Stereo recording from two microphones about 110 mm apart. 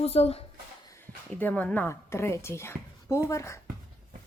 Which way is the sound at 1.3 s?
15° left (ahead or behind).